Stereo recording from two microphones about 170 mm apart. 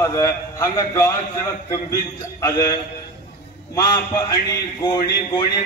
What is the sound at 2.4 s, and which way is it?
Speech, 25° left (ahead or behind).